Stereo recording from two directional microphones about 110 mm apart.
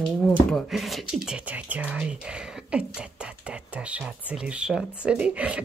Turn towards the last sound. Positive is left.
turn(degrees=-10)  # may be behind; listen again after turning